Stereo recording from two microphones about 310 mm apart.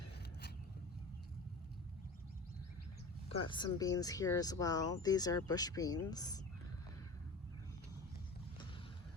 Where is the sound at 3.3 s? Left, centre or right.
Centre.